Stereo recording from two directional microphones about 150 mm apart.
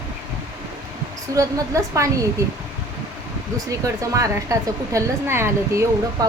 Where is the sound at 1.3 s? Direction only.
20° right (ahead or behind).